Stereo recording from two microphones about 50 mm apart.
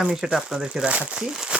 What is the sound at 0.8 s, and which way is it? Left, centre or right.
Speech, right.